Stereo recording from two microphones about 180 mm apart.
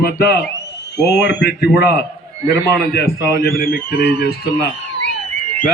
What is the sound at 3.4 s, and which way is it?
Speech, 55° left (ahead or behind).